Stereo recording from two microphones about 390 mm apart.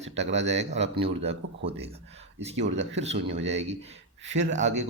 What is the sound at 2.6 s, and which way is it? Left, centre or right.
Speech, right.